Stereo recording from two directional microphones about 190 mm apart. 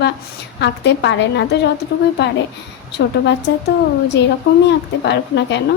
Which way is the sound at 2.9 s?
65° left (ahead or behind).